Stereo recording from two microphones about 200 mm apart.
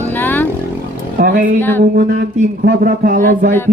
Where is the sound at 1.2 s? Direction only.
45° right (ahead or behind).